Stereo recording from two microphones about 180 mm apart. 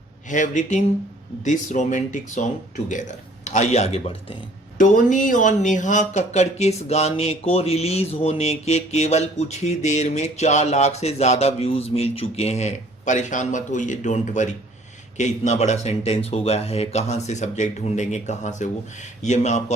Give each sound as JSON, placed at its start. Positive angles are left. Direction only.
{"t": 0.3, "sound": "speech", "side_deg": 45}
{"t": 4.8, "sound": "speech", "side_deg": 45}